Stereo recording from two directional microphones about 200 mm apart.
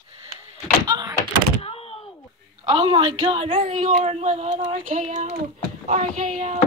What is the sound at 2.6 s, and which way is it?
A woman's voice, 25° right (ahead or behind).